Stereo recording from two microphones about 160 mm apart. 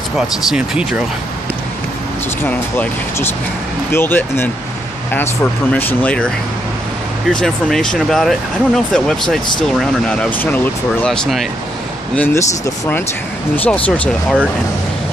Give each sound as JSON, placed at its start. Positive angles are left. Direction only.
{"t": 0.5, "sound": "speech", "side_deg": -5}
{"t": 2.4, "sound": "speech", "side_deg": 10}
{"t": 7.3, "sound": "speech", "side_deg": 5}
{"t": 12.2, "sound": "speech", "side_deg": 15}